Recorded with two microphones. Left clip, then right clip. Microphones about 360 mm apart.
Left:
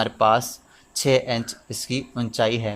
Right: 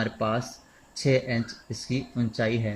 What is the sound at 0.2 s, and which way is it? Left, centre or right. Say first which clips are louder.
Speech: left 10 dB; left.